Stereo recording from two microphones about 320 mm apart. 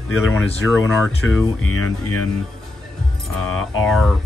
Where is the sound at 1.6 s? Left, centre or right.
Left.